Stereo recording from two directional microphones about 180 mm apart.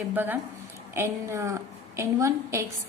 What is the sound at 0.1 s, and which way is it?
A woman's voice, 10° right (ahead or behind).